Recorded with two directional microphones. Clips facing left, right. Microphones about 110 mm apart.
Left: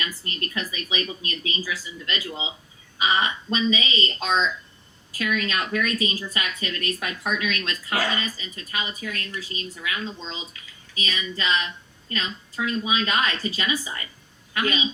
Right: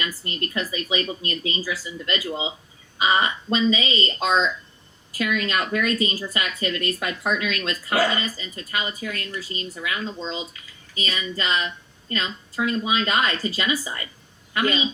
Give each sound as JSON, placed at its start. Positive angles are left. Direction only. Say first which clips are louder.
{"t": 0.0, "sound": "speech", "louder": "right 3 dB", "side_deg": -35}